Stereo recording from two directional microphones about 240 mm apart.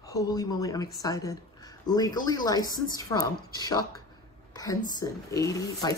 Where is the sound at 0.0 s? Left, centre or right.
Centre.